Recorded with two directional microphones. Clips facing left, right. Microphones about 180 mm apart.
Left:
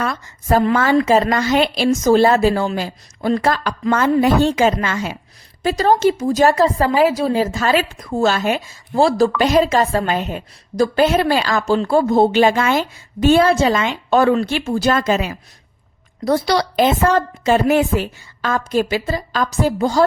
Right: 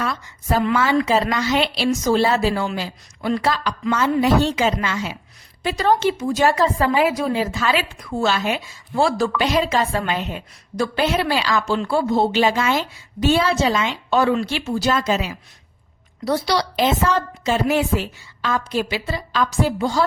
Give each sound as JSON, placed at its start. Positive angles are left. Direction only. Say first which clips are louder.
{"t": 0.0, "sound": "a woman's voice", "louder": "left 3 dB", "side_deg": 50}